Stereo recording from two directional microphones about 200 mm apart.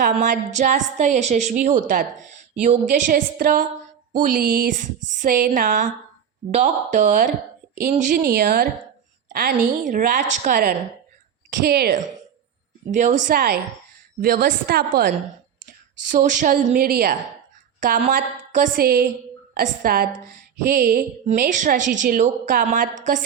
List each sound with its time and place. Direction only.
0.0 s a woman's voice: 40° right (ahead or behind)
12.9 s a woman's voice: 40° right (ahead or behind)
16.1 s a woman's voice: 40° right (ahead or behind)